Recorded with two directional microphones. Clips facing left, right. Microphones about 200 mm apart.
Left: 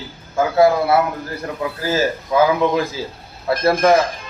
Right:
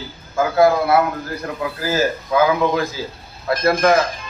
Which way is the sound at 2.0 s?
30° left (ahead or behind).